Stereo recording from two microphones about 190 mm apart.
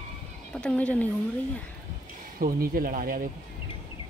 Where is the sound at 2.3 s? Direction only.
50° right (ahead or behind).